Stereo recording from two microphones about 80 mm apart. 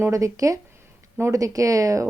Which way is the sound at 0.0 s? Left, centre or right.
Right.